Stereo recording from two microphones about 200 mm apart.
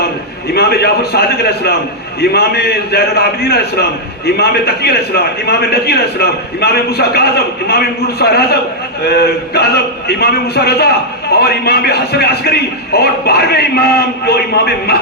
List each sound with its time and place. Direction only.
0.5 s a man's voice: 50° left (ahead or behind)